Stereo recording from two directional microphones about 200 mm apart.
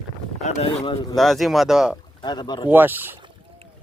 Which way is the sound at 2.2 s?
20° left (ahead or behind).